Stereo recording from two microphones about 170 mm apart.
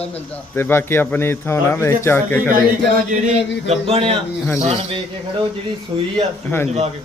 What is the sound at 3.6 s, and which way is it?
Speech, 35° right (ahead or behind).